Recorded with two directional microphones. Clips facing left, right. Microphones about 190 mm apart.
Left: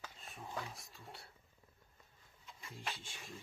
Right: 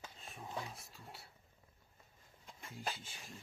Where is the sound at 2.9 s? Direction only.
Centre (ahead or behind).